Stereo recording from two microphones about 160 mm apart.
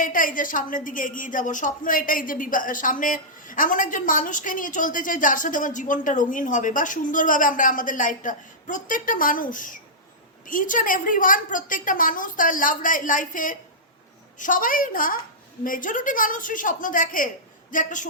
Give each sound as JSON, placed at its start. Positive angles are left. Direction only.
{"t": 0.0, "sound": "a woman's voice", "side_deg": 60}